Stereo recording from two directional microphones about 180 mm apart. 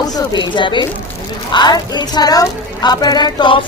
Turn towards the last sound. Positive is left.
turn(degrees=25)  # may be behind; listen again after turning